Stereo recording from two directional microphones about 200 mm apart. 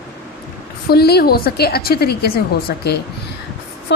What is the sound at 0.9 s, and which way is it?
A woman's voice, 50° left (ahead or behind).